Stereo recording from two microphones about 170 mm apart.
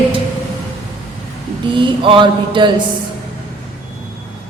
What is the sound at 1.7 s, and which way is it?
A woman's voice, 30° right (ahead or behind).